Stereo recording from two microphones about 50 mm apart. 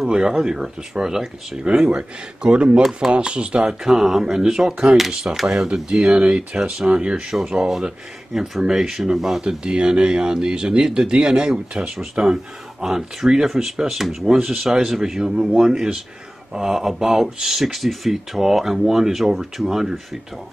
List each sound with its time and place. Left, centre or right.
0.1 s speech: centre
1.9 s speech: centre
3.8 s speech: centre